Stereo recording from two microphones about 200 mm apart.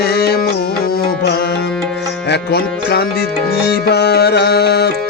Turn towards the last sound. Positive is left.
turn(degrees=55)  # may be behind; listen again after turning